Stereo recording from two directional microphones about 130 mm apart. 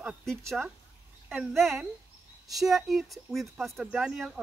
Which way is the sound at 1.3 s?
Centre (ahead or behind).